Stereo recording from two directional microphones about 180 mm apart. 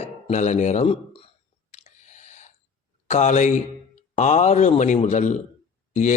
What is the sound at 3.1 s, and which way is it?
A man's voice, 40° left (ahead or behind).